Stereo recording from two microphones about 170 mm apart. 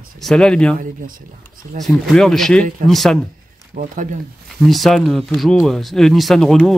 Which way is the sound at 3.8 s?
50° right (ahead or behind).